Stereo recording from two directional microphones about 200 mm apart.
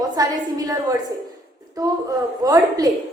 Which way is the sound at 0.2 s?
20° right (ahead or behind).